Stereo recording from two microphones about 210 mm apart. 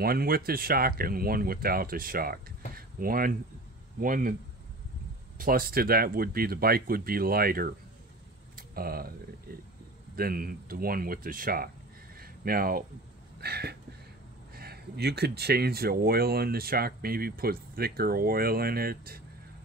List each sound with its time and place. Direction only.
0.0 s speech: 45° right (ahead or behind)
5.4 s speech: 45° right (ahead or behind)
9.5 s a sound: 45° right (ahead or behind)
10.1 s speech: 45° right (ahead or behind)
12.2 s a sound: 45° right (ahead or behind)
14.5 s speech: 50° right (ahead or behind)